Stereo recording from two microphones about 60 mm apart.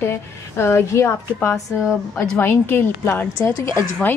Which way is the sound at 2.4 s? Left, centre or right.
Left.